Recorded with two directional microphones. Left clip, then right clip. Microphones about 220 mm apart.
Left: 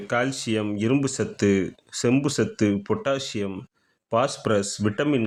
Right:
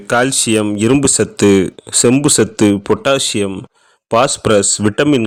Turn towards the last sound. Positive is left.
turn(degrees=-45)  # may be behind; listen again after turning